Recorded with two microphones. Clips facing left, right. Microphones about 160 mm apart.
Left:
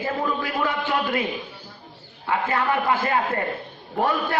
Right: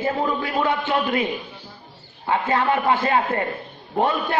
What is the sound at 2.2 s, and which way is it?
A man's voice, 30° right (ahead or behind).